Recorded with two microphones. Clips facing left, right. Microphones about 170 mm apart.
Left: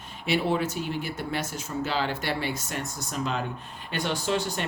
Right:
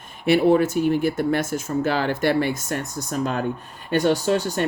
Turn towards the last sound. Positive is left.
turn(degrees=-45)  # may be behind; listen again after turning